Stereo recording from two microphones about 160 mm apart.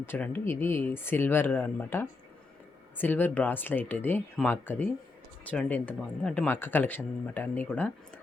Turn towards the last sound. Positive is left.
turn(degrees=10)  # may be behind; listen again after turning